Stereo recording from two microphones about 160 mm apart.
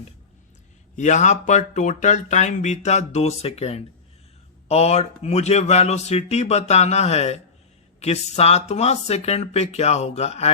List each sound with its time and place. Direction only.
0.9 s speech: 50° left (ahead or behind)